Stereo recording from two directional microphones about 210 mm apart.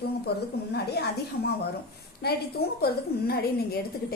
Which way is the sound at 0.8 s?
50° left (ahead or behind).